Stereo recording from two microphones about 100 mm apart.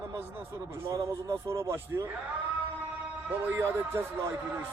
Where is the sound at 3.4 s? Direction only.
25° right (ahead or behind).